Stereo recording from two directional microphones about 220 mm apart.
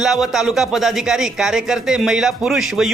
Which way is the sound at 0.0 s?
Centre (ahead or behind).